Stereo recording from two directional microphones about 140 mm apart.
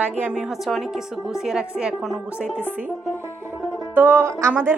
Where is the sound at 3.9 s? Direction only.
15° right (ahead or behind).